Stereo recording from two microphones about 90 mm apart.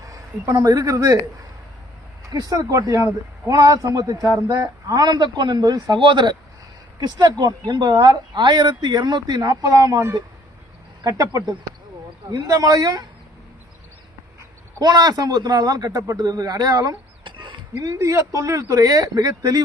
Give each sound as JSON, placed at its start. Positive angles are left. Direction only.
{"t": 0.6, "sound": "a man's voice", "side_deg": -45}
{"t": 2.3, "sound": "a man's voice", "side_deg": -45}
{"t": 7.0, "sound": "a man's voice", "side_deg": -50}
{"t": 14.8, "sound": "a man's voice", "side_deg": -45}
{"t": 17.2, "sound": "a sound", "side_deg": -60}
{"t": 17.7, "sound": "speech", "side_deg": -40}